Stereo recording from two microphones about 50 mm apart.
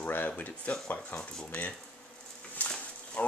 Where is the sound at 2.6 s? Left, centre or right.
Left.